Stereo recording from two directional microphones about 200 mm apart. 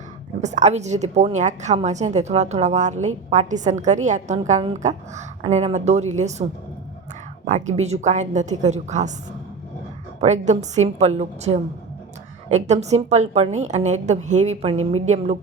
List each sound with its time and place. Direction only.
0.4 s a woman's voice: 35° right (ahead or behind)
10.2 s a woman's voice: 35° right (ahead or behind)